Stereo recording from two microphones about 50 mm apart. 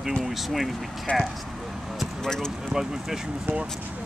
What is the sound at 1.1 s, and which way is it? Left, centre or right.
Speech, left.